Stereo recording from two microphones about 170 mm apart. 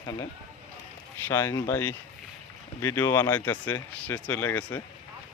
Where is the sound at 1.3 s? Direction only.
15° left (ahead or behind).